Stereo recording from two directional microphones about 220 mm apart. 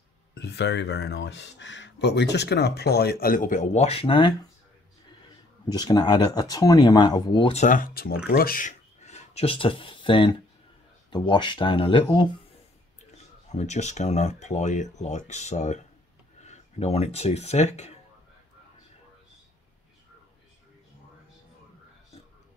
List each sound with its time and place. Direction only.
0.3 s speech: 50° left (ahead or behind); by 4.5 s 20° left (ahead or behind)
5.7 s speech: 20° left (ahead or behind)
13.5 s speech: 30° left (ahead or behind)